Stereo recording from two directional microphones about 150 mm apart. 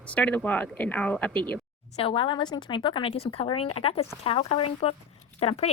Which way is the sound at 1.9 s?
40° left (ahead or behind).